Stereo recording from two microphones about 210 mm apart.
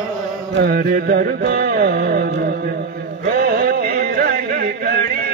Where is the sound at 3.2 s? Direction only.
45° right (ahead or behind).